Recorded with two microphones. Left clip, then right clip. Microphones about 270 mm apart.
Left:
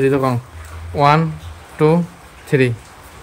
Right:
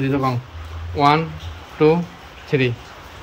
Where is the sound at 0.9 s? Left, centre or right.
Left.